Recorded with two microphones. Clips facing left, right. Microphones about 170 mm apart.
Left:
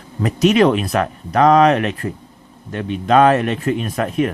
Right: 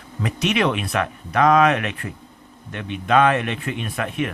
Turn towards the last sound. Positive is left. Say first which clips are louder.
# left 6 dB
turn(degrees=40)  # may be behind; listen again after turning